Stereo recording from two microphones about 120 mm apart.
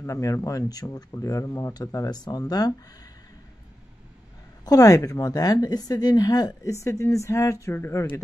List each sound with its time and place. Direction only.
0.0 s speech: 30° left (ahead or behind)
4.6 s speech: 30° left (ahead or behind)